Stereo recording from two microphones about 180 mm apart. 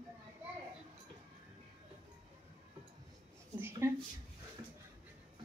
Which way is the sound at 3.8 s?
15° right (ahead or behind).